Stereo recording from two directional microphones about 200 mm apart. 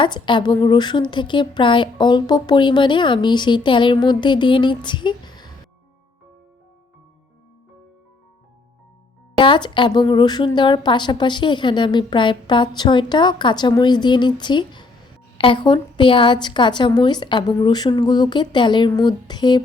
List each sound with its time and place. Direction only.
0.0 s a woman's voice: 25° left (ahead or behind)
9.4 s a woman's voice: 25° left (ahead or behind)